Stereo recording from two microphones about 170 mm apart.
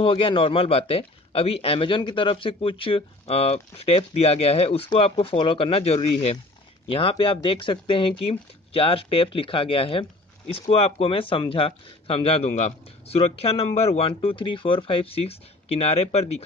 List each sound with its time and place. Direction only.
0.0 s speech: 30° left (ahead or behind)